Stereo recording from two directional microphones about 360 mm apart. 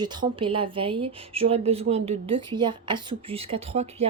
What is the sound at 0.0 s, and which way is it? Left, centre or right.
A woman's voice, centre.